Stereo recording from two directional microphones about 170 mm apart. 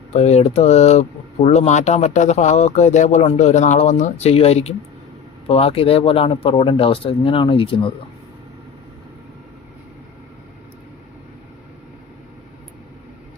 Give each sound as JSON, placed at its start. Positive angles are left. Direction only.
{"t": 0.1, "sound": "speech", "side_deg": 40}